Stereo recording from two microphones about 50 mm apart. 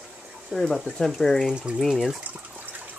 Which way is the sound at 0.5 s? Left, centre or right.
Centre.